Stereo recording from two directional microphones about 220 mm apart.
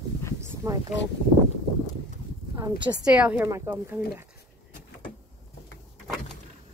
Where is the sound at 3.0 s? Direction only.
5° right (ahead or behind).